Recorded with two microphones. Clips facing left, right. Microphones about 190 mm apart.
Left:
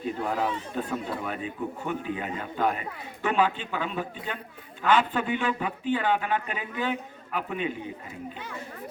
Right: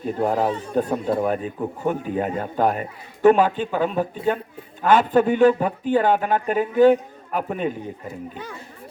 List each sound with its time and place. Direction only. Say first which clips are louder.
0.2 s a man's voice: right 10 dB; 45° right (ahead or behind)